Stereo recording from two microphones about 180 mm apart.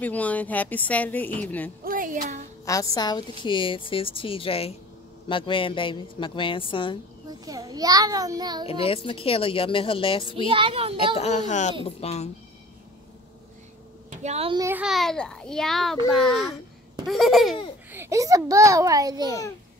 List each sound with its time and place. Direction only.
0.0 s a woman's voice: 10° left (ahead or behind)
1.9 s speech: 50° right (ahead or behind)
2.6 s a woman's voice: 20° left (ahead or behind)
7.2 s a child's voice: 20° right (ahead or behind)
8.6 s a woman's voice: 30° left (ahead or behind)
10.5 s a child's voice: 30° right (ahead or behind)
11.1 s a woman's voice: 40° left (ahead or behind)
14.2 s a child's voice: 35° right (ahead or behind)
14.6 s a child's voice: 10° right (ahead or behind)
17.9 s a child's voice: 15° right (ahead or behind)